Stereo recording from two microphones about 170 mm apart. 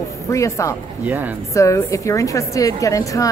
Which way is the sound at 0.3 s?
20° left (ahead or behind).